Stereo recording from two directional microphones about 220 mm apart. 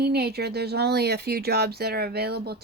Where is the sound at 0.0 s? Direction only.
45° right (ahead or behind).